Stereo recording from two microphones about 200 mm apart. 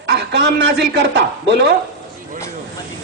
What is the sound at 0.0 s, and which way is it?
A man's voice, 60° right (ahead or behind).